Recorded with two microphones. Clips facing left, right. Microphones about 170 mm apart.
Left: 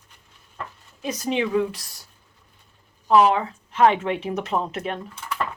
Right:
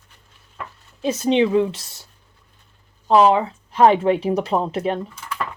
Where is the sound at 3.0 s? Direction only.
30° right (ahead or behind).